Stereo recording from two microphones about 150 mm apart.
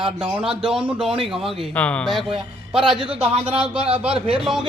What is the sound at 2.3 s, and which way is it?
Speech, 35° right (ahead or behind).